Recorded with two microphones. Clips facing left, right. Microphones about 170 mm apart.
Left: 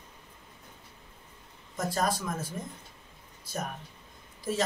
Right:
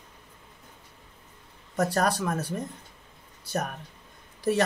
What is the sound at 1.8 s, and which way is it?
Speech, 70° right (ahead or behind).